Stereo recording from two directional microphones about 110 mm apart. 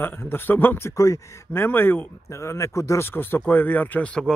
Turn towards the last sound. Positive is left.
turn(degrees=10)  # may be behind; listen again after turning